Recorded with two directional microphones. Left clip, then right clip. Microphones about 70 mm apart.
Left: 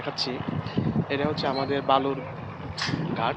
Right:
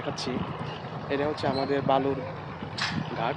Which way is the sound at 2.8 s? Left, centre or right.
Centre.